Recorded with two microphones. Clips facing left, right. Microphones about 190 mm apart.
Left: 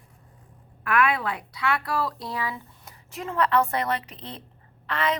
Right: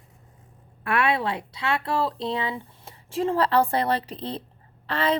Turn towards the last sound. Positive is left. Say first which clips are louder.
# right 3 dB
turn(degrees=-30)  # may be behind; listen again after turning